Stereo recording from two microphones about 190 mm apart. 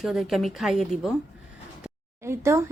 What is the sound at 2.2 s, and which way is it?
Speech, 15° right (ahead or behind).